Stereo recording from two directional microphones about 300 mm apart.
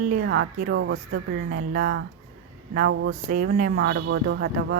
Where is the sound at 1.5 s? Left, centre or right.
Right.